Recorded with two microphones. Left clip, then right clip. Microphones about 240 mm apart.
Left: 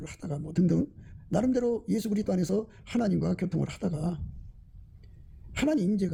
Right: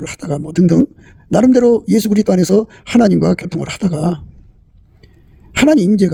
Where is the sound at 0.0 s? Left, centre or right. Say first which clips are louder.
Right 17 dB; right.